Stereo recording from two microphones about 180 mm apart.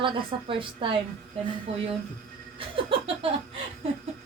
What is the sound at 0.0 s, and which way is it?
Speech, 30° right (ahead or behind).